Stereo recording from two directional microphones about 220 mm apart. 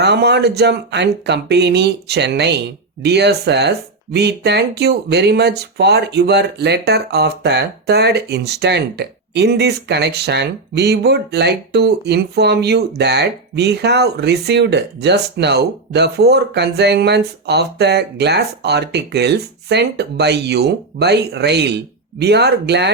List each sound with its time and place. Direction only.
0.0 s speech: 50° right (ahead or behind)